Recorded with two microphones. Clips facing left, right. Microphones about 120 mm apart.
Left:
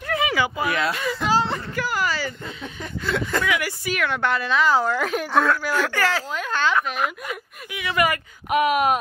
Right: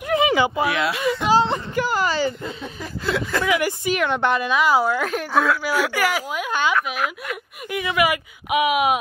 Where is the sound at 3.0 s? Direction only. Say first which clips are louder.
Right 1 dB; centre (ahead or behind).